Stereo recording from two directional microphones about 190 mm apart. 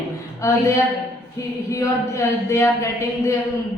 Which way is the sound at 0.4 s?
15° left (ahead or behind).